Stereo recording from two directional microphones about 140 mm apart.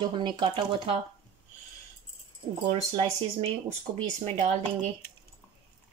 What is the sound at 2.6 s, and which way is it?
Speech, 45° right (ahead or behind).